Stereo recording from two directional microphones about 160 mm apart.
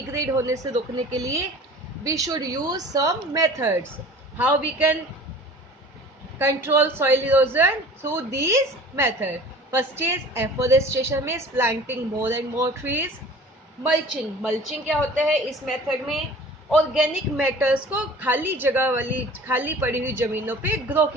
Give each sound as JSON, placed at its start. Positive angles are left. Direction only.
{"t": 0.1, "sound": "a woman's voice", "side_deg": -15}
{"t": 2.0, "sound": "a woman's voice", "side_deg": -20}
{"t": 6.4, "sound": "a woman's voice", "side_deg": -15}
{"t": 14.4, "sound": "a woman's voice", "side_deg": -5}